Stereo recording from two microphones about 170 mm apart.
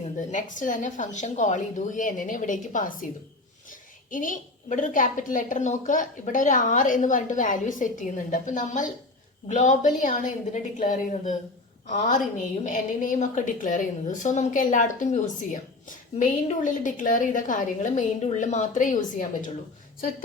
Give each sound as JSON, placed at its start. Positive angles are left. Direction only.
{"t": 0.2, "sound": "a woman's voice", "side_deg": 50}